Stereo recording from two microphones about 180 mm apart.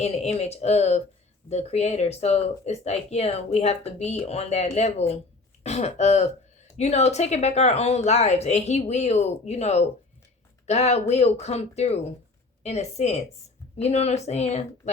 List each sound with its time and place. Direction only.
0.0 s speech: 35° left (ahead or behind)